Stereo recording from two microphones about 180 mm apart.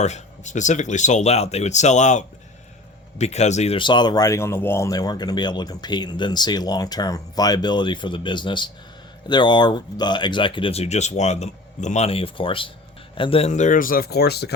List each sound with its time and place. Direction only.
0.0 s speech: 40° left (ahead or behind); by 14.5 s 65° left (ahead or behind)